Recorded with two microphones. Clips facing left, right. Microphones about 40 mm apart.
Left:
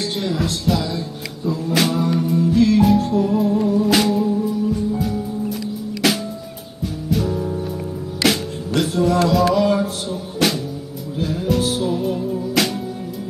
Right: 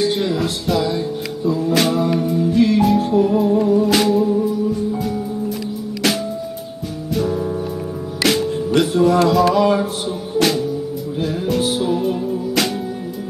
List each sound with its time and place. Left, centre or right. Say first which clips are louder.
0.0 s music: right 4 dB; centre
3.0 s music: right 3 dB; centre
3.5 s music: right 1 dB; centre
10.4 s music: right 2 dB; centre